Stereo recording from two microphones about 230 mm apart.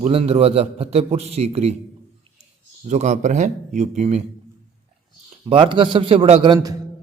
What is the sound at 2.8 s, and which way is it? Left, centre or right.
Speech, right.